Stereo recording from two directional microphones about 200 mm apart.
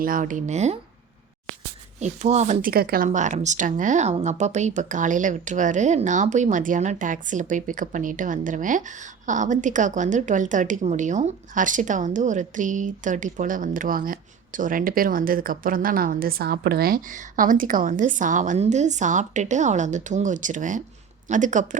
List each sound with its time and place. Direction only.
0.0 s speech: 40° right (ahead or behind)
2.0 s speech: 35° right (ahead or behind)